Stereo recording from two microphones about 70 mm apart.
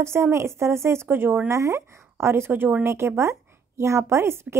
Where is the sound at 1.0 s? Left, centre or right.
Right.